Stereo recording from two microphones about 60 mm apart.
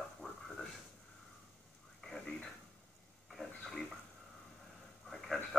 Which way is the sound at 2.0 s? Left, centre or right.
Centre.